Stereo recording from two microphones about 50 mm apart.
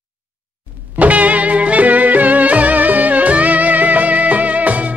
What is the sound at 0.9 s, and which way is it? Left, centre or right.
Music, right.